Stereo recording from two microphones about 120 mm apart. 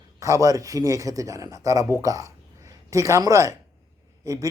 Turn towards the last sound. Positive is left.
turn(degrees=-25)  # may be behind; listen again after turning